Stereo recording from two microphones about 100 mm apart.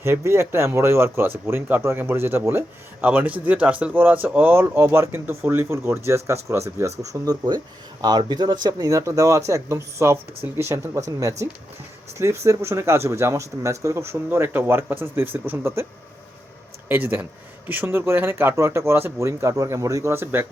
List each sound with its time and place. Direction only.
0.0 s speech: 25° right (ahead or behind)
16.9 s speech: 20° right (ahead or behind)